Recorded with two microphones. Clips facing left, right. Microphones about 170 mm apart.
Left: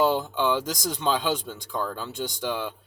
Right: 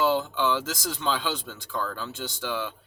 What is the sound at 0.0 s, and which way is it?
Speech, 15° left (ahead or behind).